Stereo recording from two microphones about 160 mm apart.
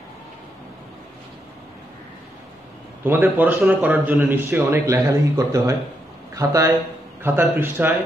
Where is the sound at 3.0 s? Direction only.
15° right (ahead or behind).